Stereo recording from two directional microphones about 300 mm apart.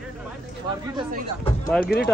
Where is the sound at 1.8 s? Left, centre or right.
Left.